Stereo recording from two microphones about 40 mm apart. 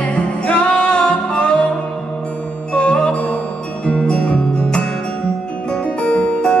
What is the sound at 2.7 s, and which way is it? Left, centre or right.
Music, left.